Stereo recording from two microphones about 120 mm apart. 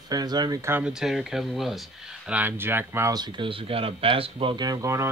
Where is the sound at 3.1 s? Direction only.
40° right (ahead or behind).